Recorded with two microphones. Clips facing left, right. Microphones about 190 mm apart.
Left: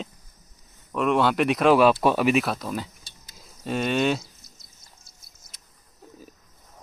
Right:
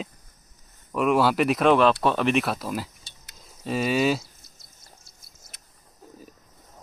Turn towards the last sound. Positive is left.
turn(degrees=-60)  # may be behind; listen again after turning